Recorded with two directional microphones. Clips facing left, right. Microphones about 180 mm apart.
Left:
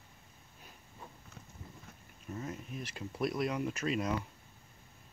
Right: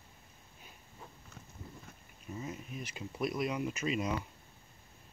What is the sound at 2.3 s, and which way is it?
Speech, 5° right (ahead or behind).